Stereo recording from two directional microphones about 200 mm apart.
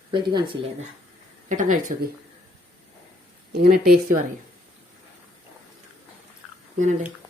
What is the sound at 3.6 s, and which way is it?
Speech, 50° right (ahead or behind).